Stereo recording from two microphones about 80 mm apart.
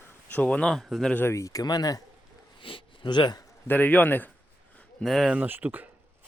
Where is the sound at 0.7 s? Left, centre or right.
Centre.